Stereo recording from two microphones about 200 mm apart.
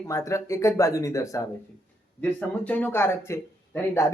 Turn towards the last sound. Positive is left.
turn(degrees=15)  # may be behind; listen again after turning